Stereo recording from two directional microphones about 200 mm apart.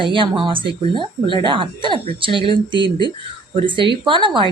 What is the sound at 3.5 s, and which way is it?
Speech, 25° right (ahead or behind).